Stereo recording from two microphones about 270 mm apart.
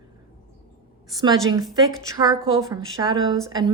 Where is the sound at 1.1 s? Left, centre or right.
Centre.